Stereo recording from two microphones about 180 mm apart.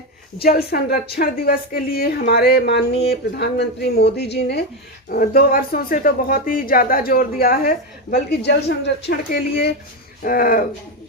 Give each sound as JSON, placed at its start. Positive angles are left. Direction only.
{"t": 0.3, "sound": "a woman's voice", "side_deg": 60}
{"t": 5.0, "sound": "speech", "side_deg": 55}
{"t": 10.2, "sound": "speech", "side_deg": 50}